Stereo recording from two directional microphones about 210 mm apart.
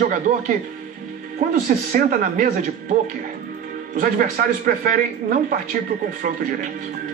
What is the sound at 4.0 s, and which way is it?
Speech, 40° right (ahead or behind).